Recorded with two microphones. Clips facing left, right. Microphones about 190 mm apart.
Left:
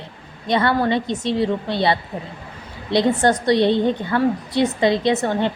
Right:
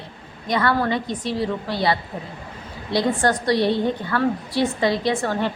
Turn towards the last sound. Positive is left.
turn(degrees=20)  # may be behind; listen again after turning